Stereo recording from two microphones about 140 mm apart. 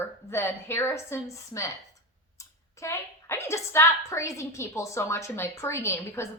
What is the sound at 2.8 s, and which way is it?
A woman's voice, 20° left (ahead or behind).